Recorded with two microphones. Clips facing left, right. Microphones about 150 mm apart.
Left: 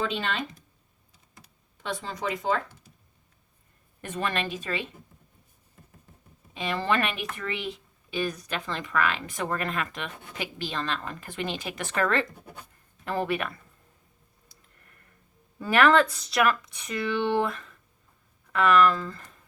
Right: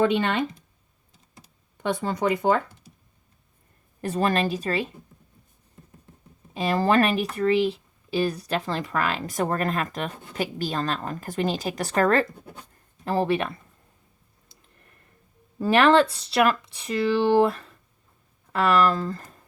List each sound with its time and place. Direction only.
0.0 s speech: 60° right (ahead or behind)
1.8 s speech: 55° right (ahead or behind)
4.0 s speech: 35° right (ahead or behind)
6.5 s speech: 40° right (ahead or behind)
14.4 s a sound: 25° right (ahead or behind)
15.5 s speech: 25° right (ahead or behind)